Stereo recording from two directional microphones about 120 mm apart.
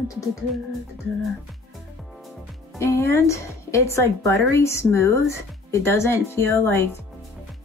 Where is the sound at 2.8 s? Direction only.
25° left (ahead or behind).